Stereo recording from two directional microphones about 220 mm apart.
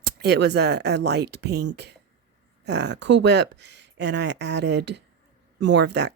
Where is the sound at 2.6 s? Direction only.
50° right (ahead or behind).